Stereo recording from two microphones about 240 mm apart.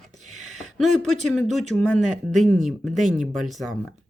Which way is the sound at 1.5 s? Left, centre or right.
Right.